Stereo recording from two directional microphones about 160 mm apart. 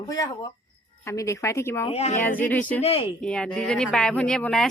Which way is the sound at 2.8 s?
40° left (ahead or behind).